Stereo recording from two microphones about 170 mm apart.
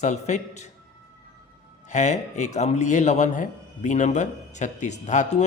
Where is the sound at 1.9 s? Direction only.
45° left (ahead or behind).